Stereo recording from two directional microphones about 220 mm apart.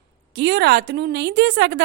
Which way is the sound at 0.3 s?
50° right (ahead or behind).